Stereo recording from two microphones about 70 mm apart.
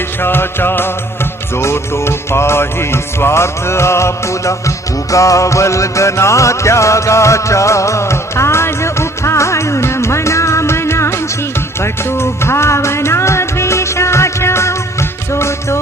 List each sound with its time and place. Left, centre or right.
0.2 s music: left